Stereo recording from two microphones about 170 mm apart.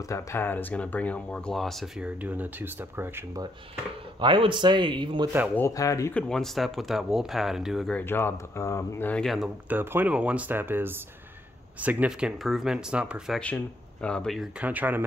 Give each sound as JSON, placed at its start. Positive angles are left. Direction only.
{"t": 0.0, "sound": "speech", "side_deg": 20}
{"t": 4.2, "sound": "speech", "side_deg": -30}
{"t": 5.6, "sound": "speech", "side_deg": 20}
{"t": 6.1, "sound": "speech", "side_deg": 5}
{"t": 8.0, "sound": "speech", "side_deg": 15}
{"t": 14.6, "sound": "speech", "side_deg": -10}